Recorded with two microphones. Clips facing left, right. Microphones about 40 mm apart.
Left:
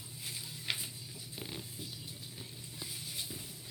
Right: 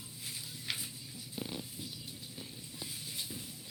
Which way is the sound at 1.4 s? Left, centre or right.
Centre.